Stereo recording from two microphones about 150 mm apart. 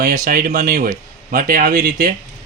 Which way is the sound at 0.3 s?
75° right (ahead or behind).